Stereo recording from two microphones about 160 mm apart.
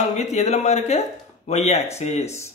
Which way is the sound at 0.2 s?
45° left (ahead or behind).